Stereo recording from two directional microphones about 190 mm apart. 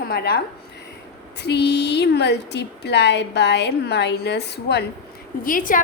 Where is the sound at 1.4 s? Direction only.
65° left (ahead or behind).